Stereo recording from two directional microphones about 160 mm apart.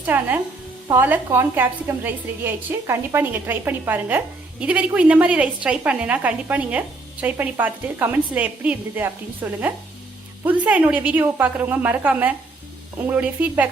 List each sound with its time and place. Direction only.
0.0 s a woman's voice: 10° right (ahead or behind)